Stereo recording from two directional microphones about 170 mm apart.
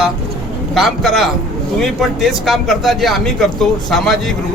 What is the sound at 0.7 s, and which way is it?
Speech, centre (ahead or behind).